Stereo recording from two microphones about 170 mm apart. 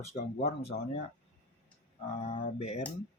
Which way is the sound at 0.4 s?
40° left (ahead or behind).